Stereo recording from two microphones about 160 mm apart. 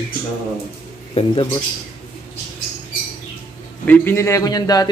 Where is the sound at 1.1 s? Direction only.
35° left (ahead or behind).